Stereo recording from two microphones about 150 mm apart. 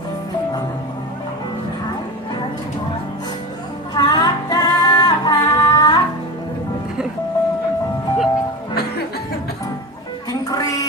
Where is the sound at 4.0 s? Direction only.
25° left (ahead or behind).